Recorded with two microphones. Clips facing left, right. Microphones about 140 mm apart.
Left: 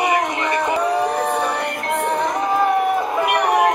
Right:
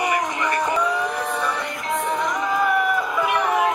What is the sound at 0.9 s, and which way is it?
Music, 65° left (ahead or behind).